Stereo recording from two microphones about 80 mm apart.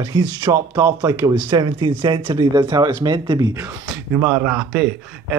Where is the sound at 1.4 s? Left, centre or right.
Right.